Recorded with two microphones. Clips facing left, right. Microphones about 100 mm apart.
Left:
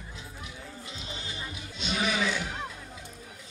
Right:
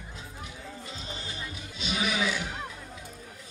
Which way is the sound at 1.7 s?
5° right (ahead or behind).